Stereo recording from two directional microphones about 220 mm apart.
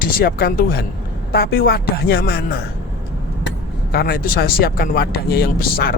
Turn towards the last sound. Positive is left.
turn(degrees=45)  # may be behind; listen again after turning